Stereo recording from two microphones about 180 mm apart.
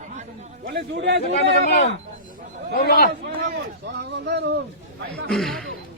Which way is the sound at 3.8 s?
70° right (ahead or behind).